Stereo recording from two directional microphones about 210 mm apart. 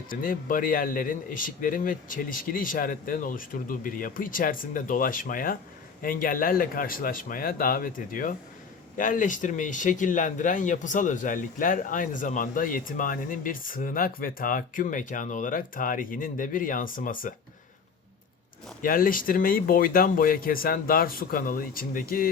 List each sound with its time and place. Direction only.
0.1 s speech: 40° left (ahead or behind)
18.8 s speech: 40° left (ahead or behind)